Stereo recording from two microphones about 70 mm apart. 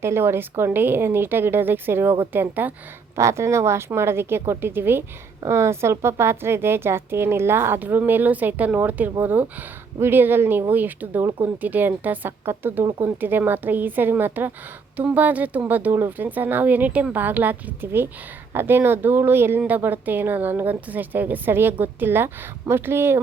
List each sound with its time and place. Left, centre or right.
0.0 s a woman's voice: right
3.2 s a woman's voice: right